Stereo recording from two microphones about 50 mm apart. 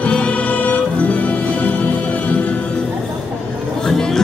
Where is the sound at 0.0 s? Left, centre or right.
Left.